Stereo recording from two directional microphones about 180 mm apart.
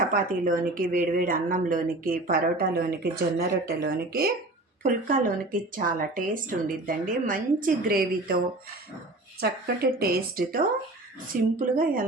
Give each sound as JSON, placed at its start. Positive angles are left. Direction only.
{"t": 0.1, "sound": "a woman's voice", "side_deg": -50}
{"t": 4.8, "sound": "a woman's voice", "side_deg": -50}
{"t": 9.4, "sound": "a woman's voice", "side_deg": -60}